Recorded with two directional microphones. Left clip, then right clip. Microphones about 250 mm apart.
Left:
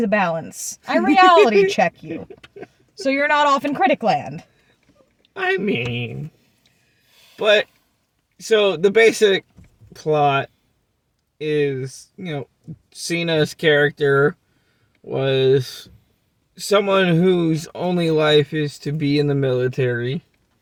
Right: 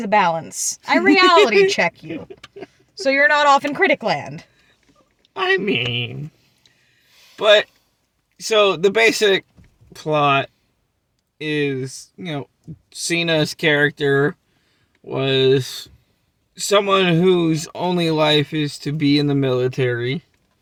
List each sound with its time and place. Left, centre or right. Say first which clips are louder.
0.0 s speech: right 3 dB; centre
0.5 s speech: right 7 dB; centre
0.9 s speech: left 1 dB; centre
2.0 s speech: even; centre
3.2 s speech: right 3 dB; centre
5.3 s speech: right 2 dB; centre
8.4 s speech: right 1 dB; centre